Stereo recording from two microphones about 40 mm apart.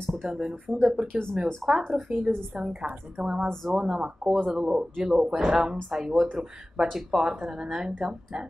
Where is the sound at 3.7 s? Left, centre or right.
Centre.